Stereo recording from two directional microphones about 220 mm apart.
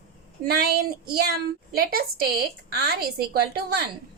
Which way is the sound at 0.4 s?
45° right (ahead or behind).